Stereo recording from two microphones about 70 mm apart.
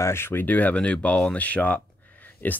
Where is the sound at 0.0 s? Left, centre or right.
Left.